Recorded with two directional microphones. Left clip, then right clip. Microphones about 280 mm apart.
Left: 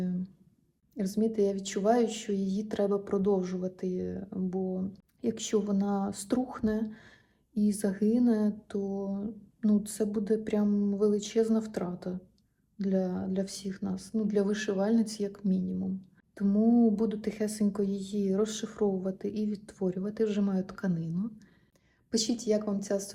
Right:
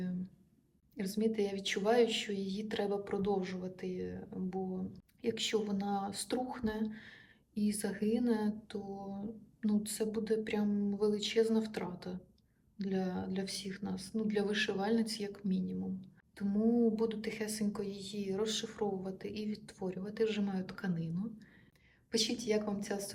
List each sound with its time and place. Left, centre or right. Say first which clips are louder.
0.9 s speech: left 5 dB; centre
16.9 s a woman's voice: left 4 dB; centre